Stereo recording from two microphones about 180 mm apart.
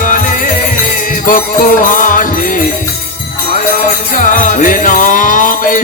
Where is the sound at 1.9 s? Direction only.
50° left (ahead or behind).